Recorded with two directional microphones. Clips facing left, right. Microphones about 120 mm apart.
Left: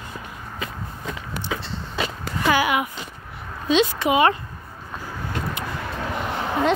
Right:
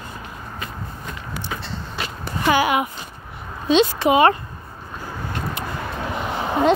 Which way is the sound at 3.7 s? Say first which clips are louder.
Right 3 dB; 30° right (ahead or behind).